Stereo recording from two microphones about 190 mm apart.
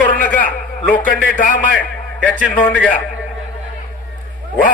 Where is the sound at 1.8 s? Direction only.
10° left (ahead or behind).